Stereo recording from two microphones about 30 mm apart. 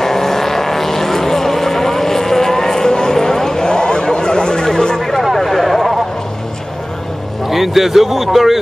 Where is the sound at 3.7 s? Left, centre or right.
Left; by 5.9 s centre.